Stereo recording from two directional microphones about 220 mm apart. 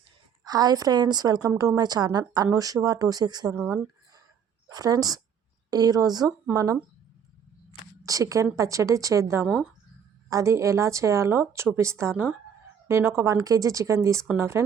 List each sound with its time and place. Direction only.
0.4 s a woman's voice: 15° right (ahead or behind)
8.0 s a woman's voice: 15° right (ahead or behind)